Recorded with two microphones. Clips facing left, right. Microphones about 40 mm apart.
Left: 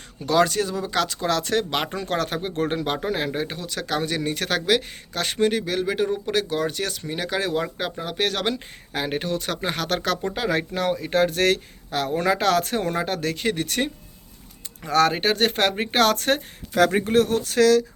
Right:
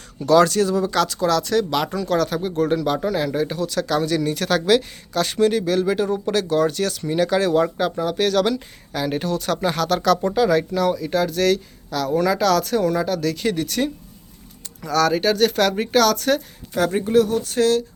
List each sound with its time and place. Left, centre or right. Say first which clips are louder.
0.3 s speech: right 5 dB; centre
1.4 s speech: right 3 dB; left
16.7 s speech: right 1 dB; left